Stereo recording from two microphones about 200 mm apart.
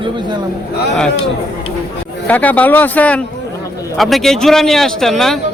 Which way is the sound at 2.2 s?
10° left (ahead or behind).